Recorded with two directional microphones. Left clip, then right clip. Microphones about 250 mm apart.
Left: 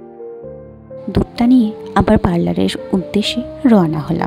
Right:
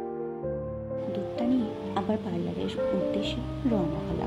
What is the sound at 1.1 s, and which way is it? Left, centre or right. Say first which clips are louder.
Music: left 16 dB; left.